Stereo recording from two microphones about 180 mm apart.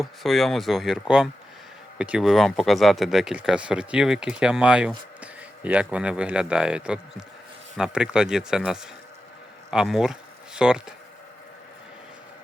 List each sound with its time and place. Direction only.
0.0 s speech: centre (ahead or behind)